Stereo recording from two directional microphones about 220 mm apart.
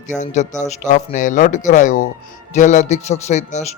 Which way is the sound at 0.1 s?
35° left (ahead or behind).